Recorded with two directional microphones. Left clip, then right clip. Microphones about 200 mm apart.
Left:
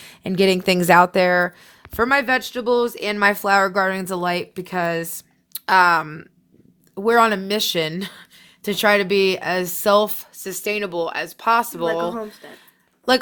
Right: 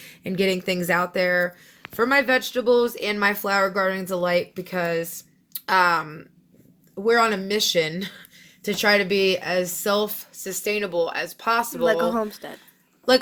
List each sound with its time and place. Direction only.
0.0 s speech: 45° left (ahead or behind)
12.1 s speech: 35° right (ahead or behind)
13.1 s speech: 55° left (ahead or behind)